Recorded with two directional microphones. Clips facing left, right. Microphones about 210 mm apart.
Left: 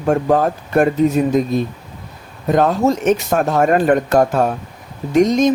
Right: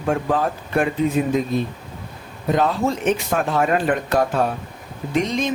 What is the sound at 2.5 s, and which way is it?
Speech, 45° left (ahead or behind).